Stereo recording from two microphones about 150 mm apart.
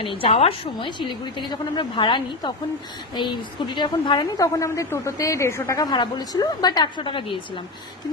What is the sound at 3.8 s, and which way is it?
A woman's voice, 30° left (ahead or behind).